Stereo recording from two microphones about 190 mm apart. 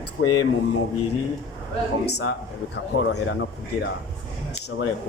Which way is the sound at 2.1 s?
60° left (ahead or behind).